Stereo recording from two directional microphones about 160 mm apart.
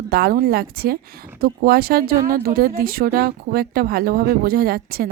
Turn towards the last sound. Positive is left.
turn(degrees=-70)  # may be behind; listen again after turning